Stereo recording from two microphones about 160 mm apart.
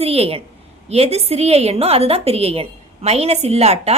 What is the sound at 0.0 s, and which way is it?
A woman's voice, 40° right (ahead or behind).